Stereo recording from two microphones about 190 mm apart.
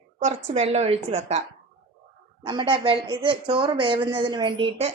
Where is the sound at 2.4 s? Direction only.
25° right (ahead or behind).